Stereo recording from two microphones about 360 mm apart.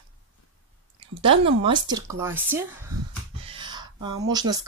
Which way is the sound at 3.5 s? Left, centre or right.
Centre.